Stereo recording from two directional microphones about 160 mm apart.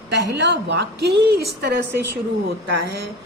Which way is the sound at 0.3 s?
90° right.